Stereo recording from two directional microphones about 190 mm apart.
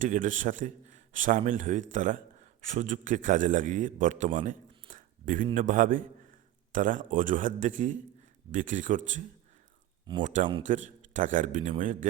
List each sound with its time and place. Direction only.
0.0 s a man's voice: 45° right (ahead or behind)
4.4 s a sound: 45° right (ahead or behind)
5.5 s a man's voice: 45° right (ahead or behind)
10.2 s a man's voice: 40° right (ahead or behind)